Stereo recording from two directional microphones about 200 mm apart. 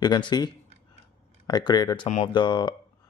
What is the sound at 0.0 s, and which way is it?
Speech, 20° left (ahead or behind).